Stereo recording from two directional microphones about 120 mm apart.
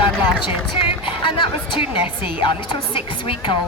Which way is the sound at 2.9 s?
45° left (ahead or behind).